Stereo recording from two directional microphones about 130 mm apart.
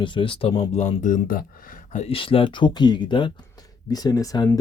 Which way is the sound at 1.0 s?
85° left.